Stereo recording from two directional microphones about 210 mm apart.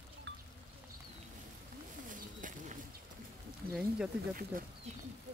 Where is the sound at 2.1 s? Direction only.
40° right (ahead or behind).